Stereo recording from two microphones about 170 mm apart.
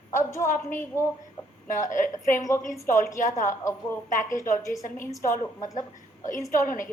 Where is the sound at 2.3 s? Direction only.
20° left (ahead or behind).